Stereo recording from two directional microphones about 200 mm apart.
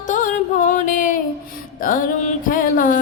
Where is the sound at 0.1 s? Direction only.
40° left (ahead or behind).